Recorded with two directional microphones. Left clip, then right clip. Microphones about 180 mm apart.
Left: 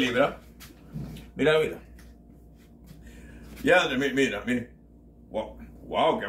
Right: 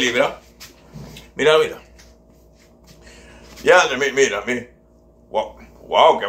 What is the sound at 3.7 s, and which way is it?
Speech, 20° left (ahead or behind).